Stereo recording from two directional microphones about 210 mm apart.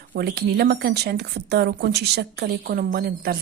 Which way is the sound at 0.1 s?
50° right (ahead or behind).